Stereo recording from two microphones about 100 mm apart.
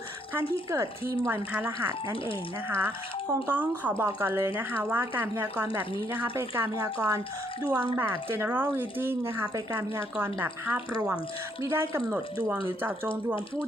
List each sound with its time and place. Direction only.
0.3 s speech: 30° right (ahead or behind)